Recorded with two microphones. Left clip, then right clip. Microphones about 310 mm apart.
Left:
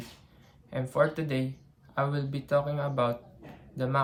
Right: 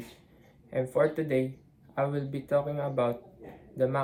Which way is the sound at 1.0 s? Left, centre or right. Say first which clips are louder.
Left 1 dB; left.